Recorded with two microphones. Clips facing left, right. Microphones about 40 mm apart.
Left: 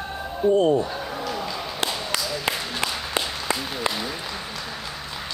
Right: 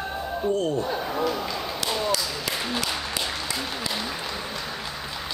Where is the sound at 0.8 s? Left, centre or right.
Centre.